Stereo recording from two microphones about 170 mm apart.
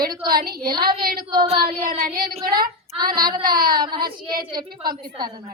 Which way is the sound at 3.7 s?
25° right (ahead or behind).